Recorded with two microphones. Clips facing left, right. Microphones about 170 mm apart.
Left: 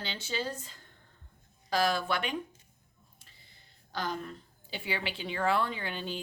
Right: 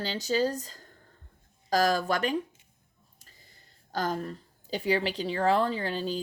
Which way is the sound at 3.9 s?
45° right (ahead or behind).